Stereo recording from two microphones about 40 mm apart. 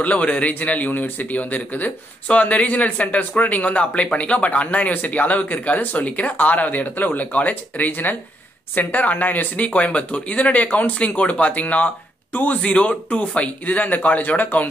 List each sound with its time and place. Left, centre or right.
0.0 s speech: left